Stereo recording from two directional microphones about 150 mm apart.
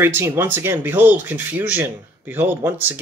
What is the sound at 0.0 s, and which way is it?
Speech, 15° right (ahead or behind).